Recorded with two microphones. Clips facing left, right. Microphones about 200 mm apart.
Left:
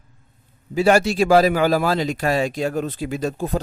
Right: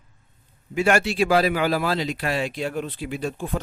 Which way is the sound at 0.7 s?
35° left (ahead or behind).